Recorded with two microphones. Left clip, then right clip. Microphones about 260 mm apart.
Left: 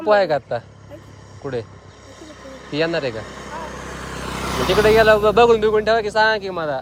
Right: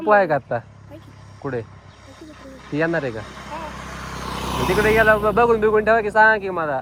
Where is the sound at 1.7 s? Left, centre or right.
Left.